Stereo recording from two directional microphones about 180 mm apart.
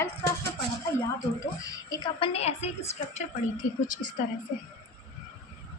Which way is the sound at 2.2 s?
35° left (ahead or behind).